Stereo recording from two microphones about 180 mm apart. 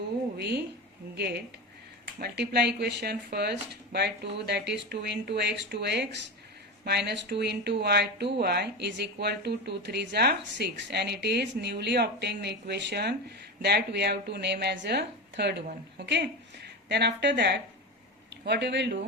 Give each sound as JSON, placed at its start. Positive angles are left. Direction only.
{"t": 0.3, "sound": "a woman's voice", "side_deg": -65}